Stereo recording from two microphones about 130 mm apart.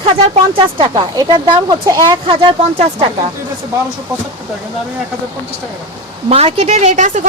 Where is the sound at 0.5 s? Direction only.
35° right (ahead or behind).